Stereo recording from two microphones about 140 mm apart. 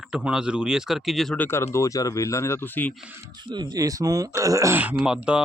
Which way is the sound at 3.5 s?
30° right (ahead or behind).